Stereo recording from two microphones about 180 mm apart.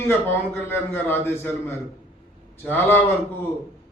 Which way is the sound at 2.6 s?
10° left (ahead or behind).